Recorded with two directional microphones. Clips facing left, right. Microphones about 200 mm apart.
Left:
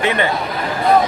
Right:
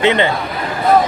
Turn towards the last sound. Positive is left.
turn(degrees=-25)  # may be behind; listen again after turning